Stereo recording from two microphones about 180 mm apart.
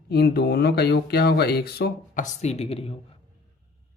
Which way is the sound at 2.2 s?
40° left (ahead or behind).